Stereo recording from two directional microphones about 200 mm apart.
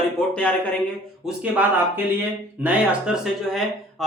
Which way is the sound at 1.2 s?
5° right (ahead or behind).